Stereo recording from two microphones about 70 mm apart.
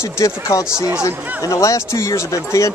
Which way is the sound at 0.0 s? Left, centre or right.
Left.